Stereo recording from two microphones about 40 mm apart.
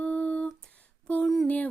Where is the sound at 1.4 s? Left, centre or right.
Left.